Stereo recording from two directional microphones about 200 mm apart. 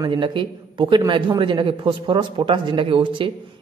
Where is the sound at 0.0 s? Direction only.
25° right (ahead or behind).